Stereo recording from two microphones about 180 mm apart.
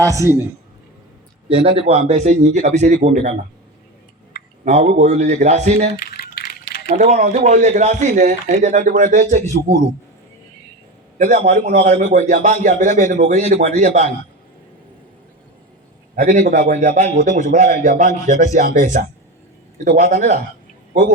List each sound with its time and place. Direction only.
1.5 s a man's voice: 30° right (ahead or behind)
4.6 s a man's voice: 40° right (ahead or behind)
5.9 s typing: 60° left (ahead or behind)
6.9 s a man's voice: 40° right (ahead or behind)
11.2 s a man's voice: 45° right (ahead or behind)
16.1 s a man's voice: 45° right (ahead or behind)